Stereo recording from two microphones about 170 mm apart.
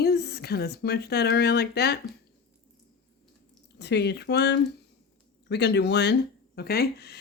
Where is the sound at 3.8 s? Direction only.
80° left.